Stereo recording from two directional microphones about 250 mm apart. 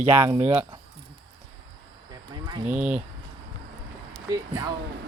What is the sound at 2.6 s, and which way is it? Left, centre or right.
Speech, centre.